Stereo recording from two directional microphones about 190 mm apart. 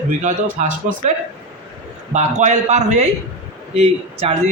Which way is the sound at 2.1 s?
40° right (ahead or behind).